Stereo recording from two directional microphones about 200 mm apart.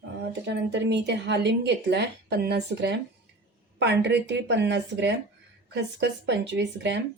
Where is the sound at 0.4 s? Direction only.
60° right (ahead or behind).